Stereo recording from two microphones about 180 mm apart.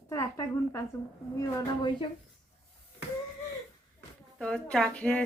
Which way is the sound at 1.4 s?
25° left (ahead or behind).